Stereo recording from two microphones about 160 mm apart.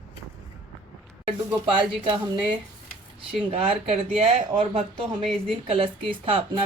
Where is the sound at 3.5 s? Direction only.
35° right (ahead or behind).